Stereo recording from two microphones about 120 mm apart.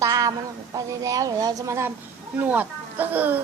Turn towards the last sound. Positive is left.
turn(degrees=-15)  # may be behind; listen again after turning